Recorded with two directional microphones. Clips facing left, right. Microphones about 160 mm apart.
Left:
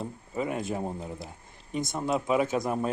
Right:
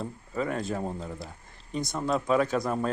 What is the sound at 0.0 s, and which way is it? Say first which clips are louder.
Speech: right 1 dB; 15° left (ahead or behind).